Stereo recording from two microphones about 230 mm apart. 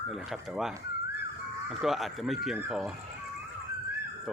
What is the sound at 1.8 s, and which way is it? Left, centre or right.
Speech, centre.